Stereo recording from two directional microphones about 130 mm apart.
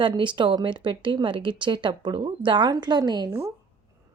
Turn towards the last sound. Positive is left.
turn(degrees=-30)  # may be behind; listen again after turning